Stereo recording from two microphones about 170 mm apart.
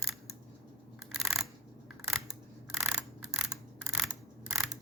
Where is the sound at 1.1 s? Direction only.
Centre (ahead or behind).